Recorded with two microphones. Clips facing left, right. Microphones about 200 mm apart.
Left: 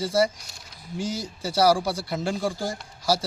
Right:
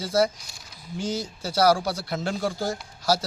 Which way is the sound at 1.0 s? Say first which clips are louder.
Right 1 dB; 35° left (ahead or behind).